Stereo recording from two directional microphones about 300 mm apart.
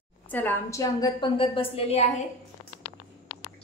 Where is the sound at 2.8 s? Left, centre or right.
Centre.